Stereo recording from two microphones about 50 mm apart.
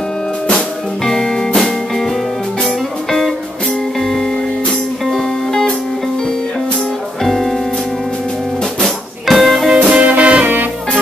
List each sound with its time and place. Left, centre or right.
0.5 s music: centre
7.2 s music: centre
8.8 s music: centre
9.8 s music: right
10.4 s music: right